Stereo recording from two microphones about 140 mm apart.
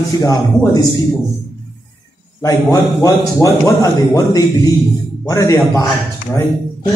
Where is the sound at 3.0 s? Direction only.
20° left (ahead or behind).